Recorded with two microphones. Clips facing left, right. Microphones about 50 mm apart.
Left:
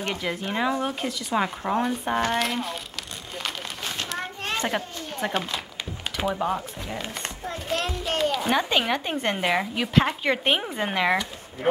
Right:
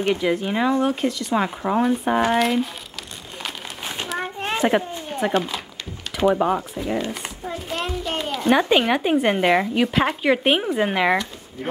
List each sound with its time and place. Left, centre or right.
0.0 s speech: centre
3.8 s a sound: centre
5.3 s speech: centre
6.3 s speech: centre
7.1 s a child's voice: centre